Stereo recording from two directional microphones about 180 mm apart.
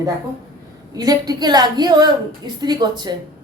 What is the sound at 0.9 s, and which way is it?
A woman's voice, 20° right (ahead or behind).